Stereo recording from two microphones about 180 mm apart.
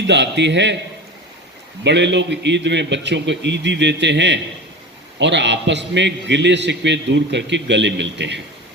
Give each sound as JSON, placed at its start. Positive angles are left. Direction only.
{"t": 0.1, "sound": "a man's voice", "side_deg": -75}
{"t": 1.8, "sound": "a man's voice", "side_deg": -75}